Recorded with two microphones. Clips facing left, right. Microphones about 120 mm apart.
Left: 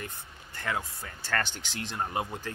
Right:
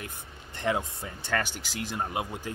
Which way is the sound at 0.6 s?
20° right (ahead or behind).